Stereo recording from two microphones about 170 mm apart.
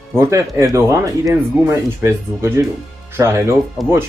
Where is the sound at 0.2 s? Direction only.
20° right (ahead or behind).